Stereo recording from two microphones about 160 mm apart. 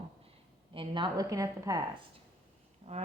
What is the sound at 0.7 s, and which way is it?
A woman's voice, 30° right (ahead or behind).